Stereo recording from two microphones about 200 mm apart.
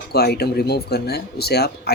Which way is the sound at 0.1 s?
50° left (ahead or behind).